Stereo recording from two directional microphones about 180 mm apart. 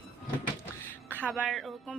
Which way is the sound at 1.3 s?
Centre (ahead or behind).